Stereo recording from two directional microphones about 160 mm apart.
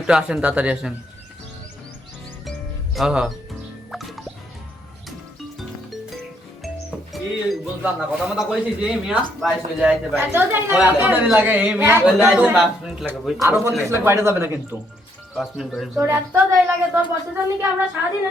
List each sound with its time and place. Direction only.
0.0 s a man's voice: 5° right (ahead or behind)
2.9 s speech: centre (ahead or behind)
7.1 s a man's voice: centre (ahead or behind)
10.2 s a woman's voice: 15° right (ahead or behind)
13.4 s a woman's voice: 20° right (ahead or behind)
15.4 s a man's voice: centre (ahead or behind)
16.0 s a woman's voice: 15° right (ahead or behind)